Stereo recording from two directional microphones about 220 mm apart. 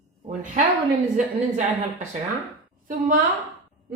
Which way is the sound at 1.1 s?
35° right (ahead or behind).